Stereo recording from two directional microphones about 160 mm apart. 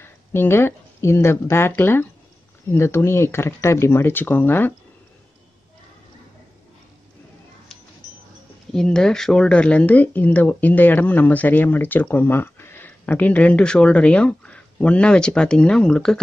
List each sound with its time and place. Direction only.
0.0 s speech: 15° left (ahead or behind)
8.7 s speech: 5° left (ahead or behind)